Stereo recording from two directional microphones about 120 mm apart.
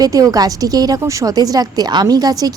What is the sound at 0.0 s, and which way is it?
Speech, 30° right (ahead or behind).